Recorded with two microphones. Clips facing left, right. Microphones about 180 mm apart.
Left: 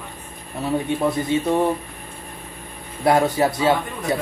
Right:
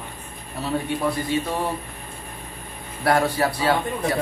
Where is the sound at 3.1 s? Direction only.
20° left (ahead or behind).